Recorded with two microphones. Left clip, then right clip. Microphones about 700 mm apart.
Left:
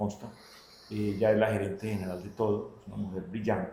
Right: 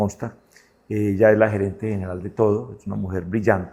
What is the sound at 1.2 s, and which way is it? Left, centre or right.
Speech, right.